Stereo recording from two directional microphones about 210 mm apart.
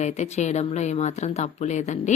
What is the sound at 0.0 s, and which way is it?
Speech, 35° left (ahead or behind).